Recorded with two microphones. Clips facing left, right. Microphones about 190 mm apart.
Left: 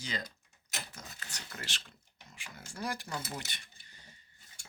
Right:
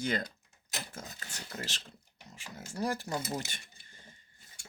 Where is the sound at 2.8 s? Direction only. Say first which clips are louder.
Right 5 dB; 35° right (ahead or behind).